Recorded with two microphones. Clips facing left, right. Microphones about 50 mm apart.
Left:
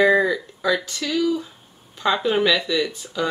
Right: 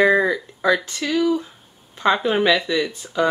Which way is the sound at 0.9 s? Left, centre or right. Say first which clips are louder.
Right 2 dB; right.